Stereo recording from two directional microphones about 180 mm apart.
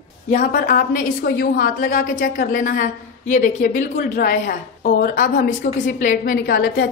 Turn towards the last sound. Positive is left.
turn(degrees=60)  # may be behind; listen again after turning